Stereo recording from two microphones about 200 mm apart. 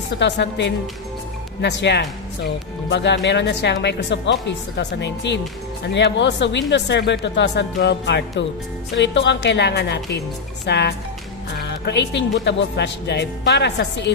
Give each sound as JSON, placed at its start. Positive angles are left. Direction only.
{"t": 0.2, "sound": "speech", "side_deg": 60}